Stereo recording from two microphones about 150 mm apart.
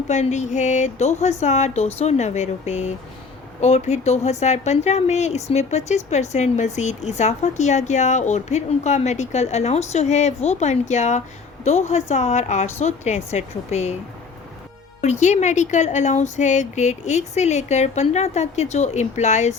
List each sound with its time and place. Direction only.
0.1 s speech: 50° left (ahead or behind)
15.0 s speech: 50° left (ahead or behind)